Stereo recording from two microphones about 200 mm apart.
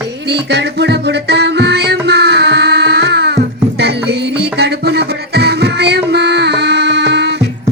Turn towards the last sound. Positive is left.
turn(degrees=-55)  # may be behind; listen again after turning